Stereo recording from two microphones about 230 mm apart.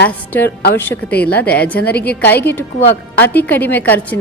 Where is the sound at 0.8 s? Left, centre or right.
Centre.